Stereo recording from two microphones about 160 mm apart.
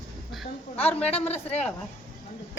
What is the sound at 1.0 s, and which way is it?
Speech, 40° left (ahead or behind).